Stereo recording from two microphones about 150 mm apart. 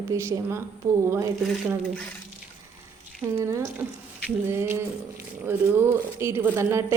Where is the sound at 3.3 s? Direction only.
20° right (ahead or behind).